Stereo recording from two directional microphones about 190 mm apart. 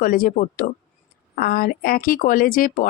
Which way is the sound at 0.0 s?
45° left (ahead or behind).